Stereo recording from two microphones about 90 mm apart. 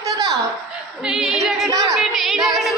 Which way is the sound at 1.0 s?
5° right (ahead or behind).